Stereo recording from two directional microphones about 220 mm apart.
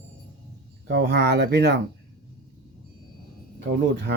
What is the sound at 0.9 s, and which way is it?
Speech, 50° right (ahead or behind).